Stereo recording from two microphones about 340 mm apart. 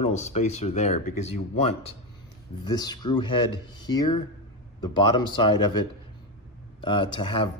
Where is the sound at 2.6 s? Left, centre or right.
Centre.